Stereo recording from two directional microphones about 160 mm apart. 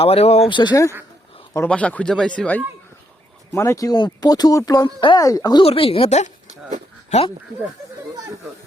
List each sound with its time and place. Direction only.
0.0 s speech: 40° left (ahead or behind)
0.5 s speech: 25° left (ahead or behind)
1.6 s speech: 10° left (ahead or behind)
3.5 s speech: 20° left (ahead or behind)
5.6 s speech: 35° left (ahead or behind)